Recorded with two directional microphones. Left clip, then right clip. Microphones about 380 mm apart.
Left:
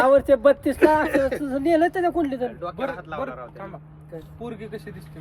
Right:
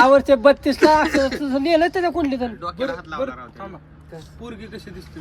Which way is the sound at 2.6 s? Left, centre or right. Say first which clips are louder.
Right 3 dB; centre.